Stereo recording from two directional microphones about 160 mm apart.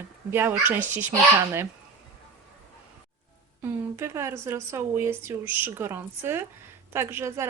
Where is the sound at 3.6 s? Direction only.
15° right (ahead or behind).